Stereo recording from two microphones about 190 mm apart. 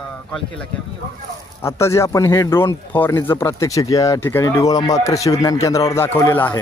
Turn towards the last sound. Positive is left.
turn(degrees=10)  # may be behind; listen again after turning